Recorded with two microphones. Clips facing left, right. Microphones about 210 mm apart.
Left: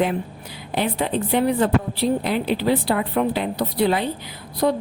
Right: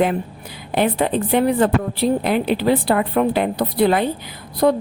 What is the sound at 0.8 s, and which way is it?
A woman's voice, 55° right (ahead or behind).